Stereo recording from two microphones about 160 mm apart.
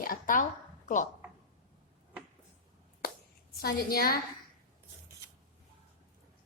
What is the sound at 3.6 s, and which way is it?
Speech, 70° left (ahead or behind).